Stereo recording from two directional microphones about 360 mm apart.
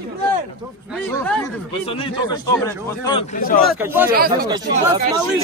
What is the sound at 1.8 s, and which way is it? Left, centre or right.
A man's voice, centre.